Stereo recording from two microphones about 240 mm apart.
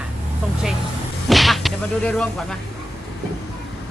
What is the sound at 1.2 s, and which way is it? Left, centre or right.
Speech, centre.